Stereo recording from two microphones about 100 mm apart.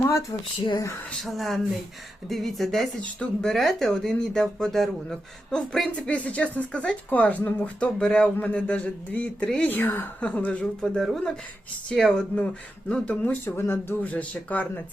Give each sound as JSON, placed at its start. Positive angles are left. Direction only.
{"t": 1.1, "sound": "speech", "side_deg": 0}